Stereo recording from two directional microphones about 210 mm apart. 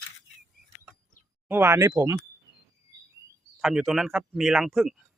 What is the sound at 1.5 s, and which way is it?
Speech, 10° right (ahead or behind).